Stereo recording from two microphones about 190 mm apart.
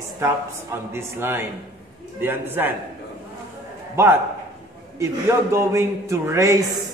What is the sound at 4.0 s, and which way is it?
A man's voice, 15° right (ahead or behind).